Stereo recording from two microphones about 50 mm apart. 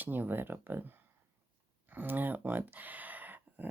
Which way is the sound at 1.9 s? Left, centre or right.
Right.